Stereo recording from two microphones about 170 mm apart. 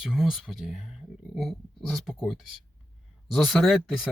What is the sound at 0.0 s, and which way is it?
Speech, 5° right (ahead or behind).